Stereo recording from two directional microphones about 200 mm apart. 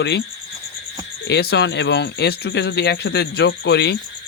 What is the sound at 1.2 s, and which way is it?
Speech, 55° left (ahead or behind).